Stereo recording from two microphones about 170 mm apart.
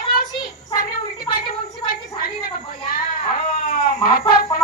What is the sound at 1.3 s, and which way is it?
Speech, 30° left (ahead or behind).